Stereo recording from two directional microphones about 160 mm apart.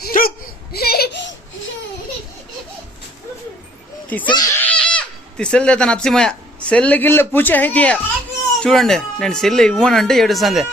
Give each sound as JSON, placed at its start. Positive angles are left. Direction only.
{"t": 0.0, "sound": "hiccup", "side_deg": 65}
{"t": 4.2, "sound": "speech", "side_deg": 25}
{"t": 4.6, "sound": "speech", "side_deg": 5}